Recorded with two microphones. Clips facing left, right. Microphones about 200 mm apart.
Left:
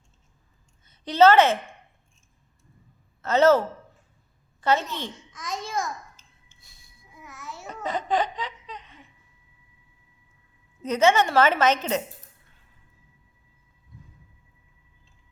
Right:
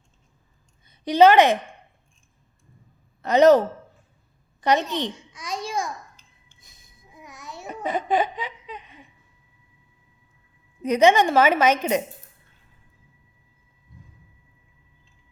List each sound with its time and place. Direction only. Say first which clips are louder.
0.9 s a woman's voice: right 2 dB; 15° right (ahead or behind)
3.2 s a man's voice: right 4 dB; 15° right (ahead or behind)
4.6 s babbling: right 3 dB; 15° right (ahead or behind)
10.8 s a woman's voice: right 3 dB; 15° right (ahead or behind)